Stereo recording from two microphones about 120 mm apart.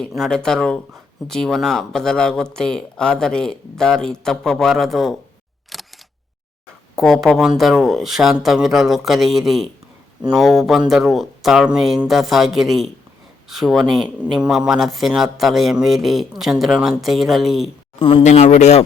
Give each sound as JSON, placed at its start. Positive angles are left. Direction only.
{"t": 0.2, "sound": "a man's voice", "side_deg": 5}
{"t": 5.7, "sound": "single-lens reflex camera", "side_deg": 0}
{"t": 6.9, "sound": "a man's voice", "side_deg": 5}
{"t": 18.2, "sound": "speech", "side_deg": 70}